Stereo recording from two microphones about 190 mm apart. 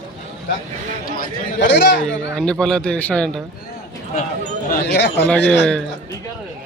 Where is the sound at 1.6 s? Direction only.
65° left (ahead or behind).